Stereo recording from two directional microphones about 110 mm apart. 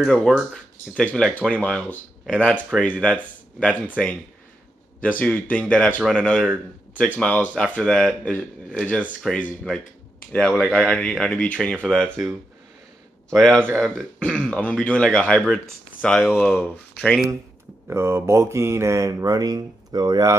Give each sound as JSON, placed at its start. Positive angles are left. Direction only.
{"t": 0.0, "sound": "speech", "side_deg": 5}
{"t": 5.0, "sound": "speech", "side_deg": 15}
{"t": 13.3, "sound": "speech", "side_deg": 10}
{"t": 17.8, "sound": "mantra", "side_deg": -25}